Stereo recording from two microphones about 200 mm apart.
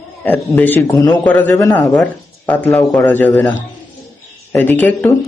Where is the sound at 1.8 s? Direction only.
Centre (ahead or behind).